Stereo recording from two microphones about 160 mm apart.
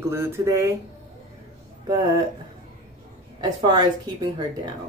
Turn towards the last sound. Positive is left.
turn(degrees=-25)  # may be behind; listen again after turning